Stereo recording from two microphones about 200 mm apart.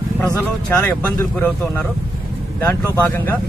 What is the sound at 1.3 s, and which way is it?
Speech, 5° left (ahead or behind).